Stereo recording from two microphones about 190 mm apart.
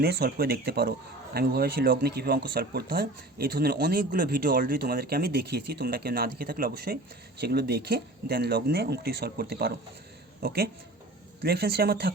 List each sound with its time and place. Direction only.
0.0 s a man's voice: 55° right (ahead or behind)